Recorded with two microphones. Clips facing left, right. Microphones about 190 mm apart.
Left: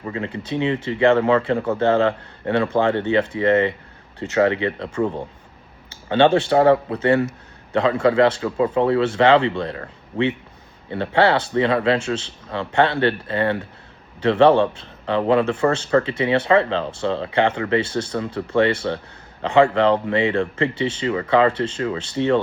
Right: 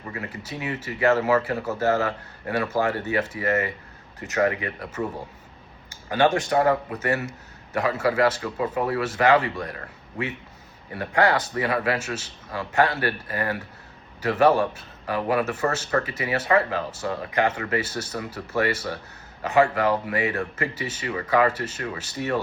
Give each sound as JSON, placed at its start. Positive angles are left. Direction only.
{"t": 0.1, "sound": "a man's voice", "side_deg": 25}
{"t": 5.0, "sound": "speech", "side_deg": 45}
{"t": 6.1, "sound": "a man's voice", "side_deg": 25}